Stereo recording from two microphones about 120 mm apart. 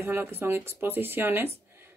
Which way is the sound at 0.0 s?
20° right (ahead or behind).